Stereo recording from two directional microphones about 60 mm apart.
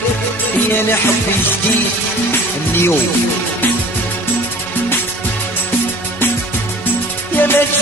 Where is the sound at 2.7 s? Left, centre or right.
Left.